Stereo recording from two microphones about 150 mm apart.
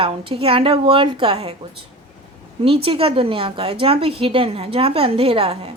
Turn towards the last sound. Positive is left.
turn(degrees=-40)  # may be behind; listen again after turning